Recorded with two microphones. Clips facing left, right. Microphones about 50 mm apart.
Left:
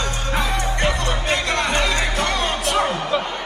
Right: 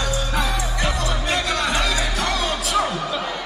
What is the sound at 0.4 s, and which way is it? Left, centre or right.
Music, left.